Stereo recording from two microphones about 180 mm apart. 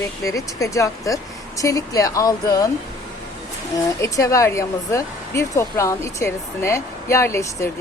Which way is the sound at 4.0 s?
20° left (ahead or behind).